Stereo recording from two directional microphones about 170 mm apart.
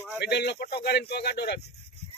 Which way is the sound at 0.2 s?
80° left.